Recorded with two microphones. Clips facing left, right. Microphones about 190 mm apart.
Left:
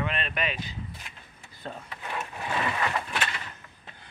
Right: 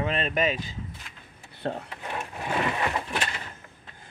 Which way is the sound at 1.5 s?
70° right (ahead or behind).